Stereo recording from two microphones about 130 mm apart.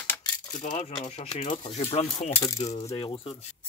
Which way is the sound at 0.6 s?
60° left (ahead or behind).